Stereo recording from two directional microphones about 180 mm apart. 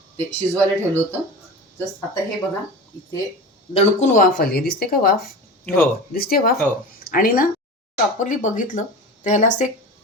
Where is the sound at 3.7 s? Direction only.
40° left (ahead or behind).